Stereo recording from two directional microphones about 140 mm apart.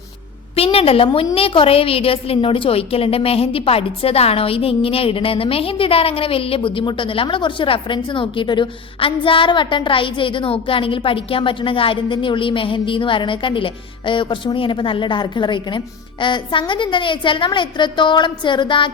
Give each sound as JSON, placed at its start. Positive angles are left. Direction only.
{"t": 0.5, "sound": "a woman's voice", "side_deg": 45}